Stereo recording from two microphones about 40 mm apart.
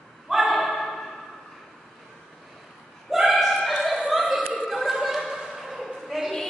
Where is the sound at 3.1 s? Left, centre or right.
Centre.